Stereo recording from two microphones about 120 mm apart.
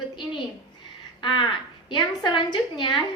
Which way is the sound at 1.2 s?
40° left (ahead or behind).